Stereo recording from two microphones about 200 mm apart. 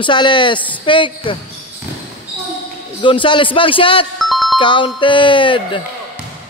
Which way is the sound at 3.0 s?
25° left (ahead or behind).